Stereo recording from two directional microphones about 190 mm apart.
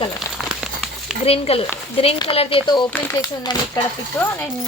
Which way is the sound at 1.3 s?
30° left (ahead or behind).